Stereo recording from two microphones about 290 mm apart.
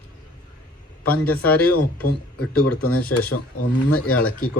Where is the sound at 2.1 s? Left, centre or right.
Left.